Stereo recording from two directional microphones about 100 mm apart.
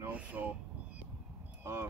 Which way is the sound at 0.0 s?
15° right (ahead or behind).